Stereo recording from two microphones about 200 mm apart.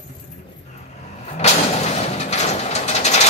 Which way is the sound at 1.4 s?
35° left (ahead or behind).